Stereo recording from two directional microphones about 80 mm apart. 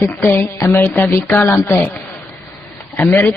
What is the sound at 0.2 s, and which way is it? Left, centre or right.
A man's voice, centre.